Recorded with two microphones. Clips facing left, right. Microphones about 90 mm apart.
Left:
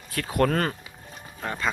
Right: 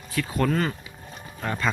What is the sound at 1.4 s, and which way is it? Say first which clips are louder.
Speech: right 2 dB; 20° left (ahead or behind).